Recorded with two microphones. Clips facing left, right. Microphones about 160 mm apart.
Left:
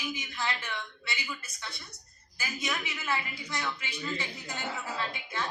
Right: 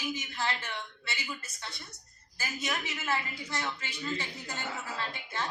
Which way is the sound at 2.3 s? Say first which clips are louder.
Even; 35° right (ahead or behind).